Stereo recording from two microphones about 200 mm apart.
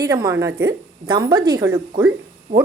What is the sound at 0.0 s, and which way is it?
Speech, 15° right (ahead or behind).